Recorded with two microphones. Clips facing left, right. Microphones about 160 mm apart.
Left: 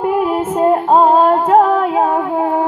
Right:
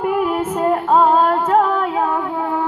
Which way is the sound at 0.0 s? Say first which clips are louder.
Left 3 dB; 35° left (ahead or behind).